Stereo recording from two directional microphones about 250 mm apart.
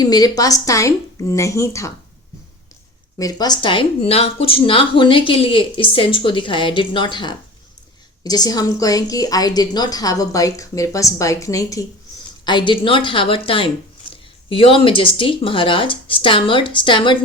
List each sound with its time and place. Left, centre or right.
0.0 s a woman's voice: centre
3.2 s a woman's voice: centre